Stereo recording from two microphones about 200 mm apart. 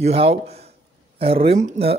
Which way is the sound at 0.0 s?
30° right (ahead or behind).